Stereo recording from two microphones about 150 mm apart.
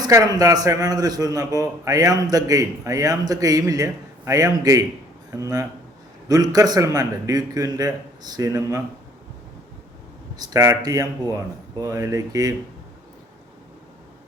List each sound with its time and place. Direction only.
0.0 s a man's voice: 25° right (ahead or behind)
10.3 s a man's voice: 25° right (ahead or behind)